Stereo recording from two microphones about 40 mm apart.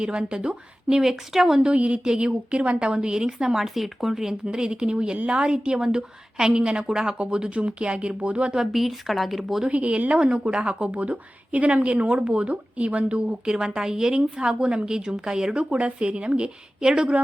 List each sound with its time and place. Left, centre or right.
0.0 s a woman's voice: right
1.0 s speech: centre
1.7 s a woman's voice: right; by 4.4 s centre
4.4 s a woman's voice: right
8.5 s speech: centre
9.6 s a woman's voice: right
13.4 s a woman's voice: centre
15.7 s a woman's voice: right